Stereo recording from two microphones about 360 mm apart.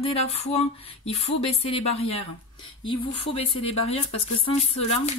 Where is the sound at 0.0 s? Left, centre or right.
Centre.